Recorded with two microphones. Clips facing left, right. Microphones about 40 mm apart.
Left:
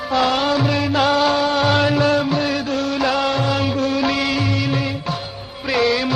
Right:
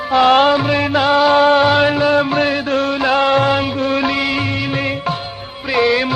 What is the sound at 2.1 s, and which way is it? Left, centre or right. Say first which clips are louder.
Music: right 4 dB; right.